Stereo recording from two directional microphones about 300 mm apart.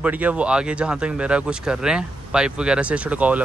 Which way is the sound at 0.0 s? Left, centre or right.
Centre.